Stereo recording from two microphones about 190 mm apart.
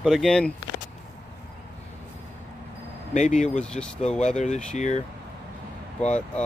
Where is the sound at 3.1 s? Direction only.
40° left (ahead or behind).